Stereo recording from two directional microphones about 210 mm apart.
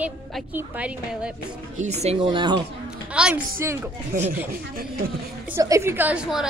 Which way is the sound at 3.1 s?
5° right (ahead or behind).